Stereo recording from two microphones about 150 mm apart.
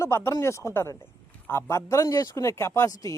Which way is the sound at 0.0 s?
15° left (ahead or behind).